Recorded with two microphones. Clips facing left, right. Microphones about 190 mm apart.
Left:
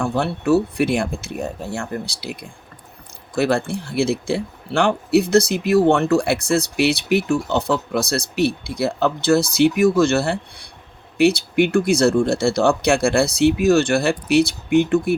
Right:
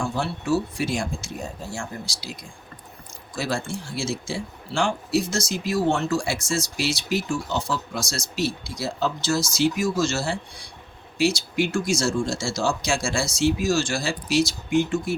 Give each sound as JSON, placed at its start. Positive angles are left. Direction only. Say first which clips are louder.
{"t": 0.0, "sound": "speech", "louder": "left 6 dB", "side_deg": 60}